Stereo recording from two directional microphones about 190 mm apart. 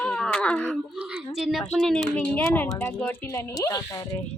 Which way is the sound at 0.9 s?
5° right (ahead or behind).